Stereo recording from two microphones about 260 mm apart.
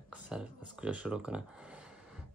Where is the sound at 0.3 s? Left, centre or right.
Centre.